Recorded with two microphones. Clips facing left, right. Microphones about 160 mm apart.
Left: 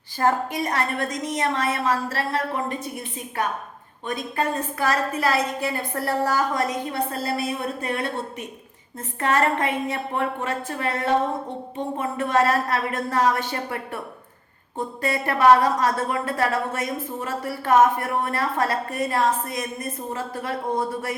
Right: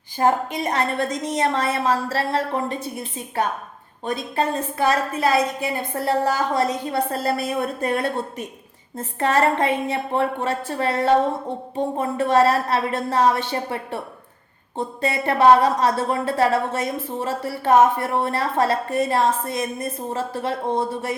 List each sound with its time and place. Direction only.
0.2 s a woman's voice: 20° right (ahead or behind)
4.0 s a woman's voice: 30° right (ahead or behind)
9.0 s a woman's voice: 30° right (ahead or behind)